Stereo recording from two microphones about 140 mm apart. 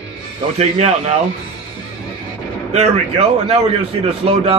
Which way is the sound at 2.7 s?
50° right (ahead or behind).